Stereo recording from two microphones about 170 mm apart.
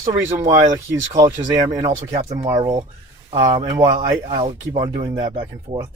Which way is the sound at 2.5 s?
25° right (ahead or behind).